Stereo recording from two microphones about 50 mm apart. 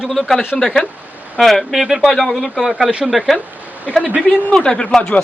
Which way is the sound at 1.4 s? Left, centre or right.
Centre.